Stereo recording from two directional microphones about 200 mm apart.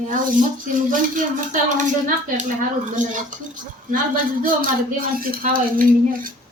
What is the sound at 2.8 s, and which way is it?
Speech, 40° right (ahead or behind).